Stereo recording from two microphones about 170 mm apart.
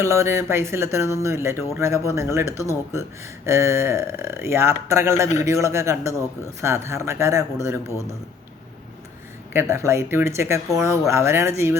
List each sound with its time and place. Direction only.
0.0 s speech: 15° right (ahead or behind)
9.5 s speech: 15° right (ahead or behind)